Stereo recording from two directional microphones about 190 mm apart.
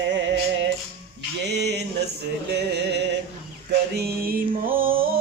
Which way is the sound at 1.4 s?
60° right (ahead or behind).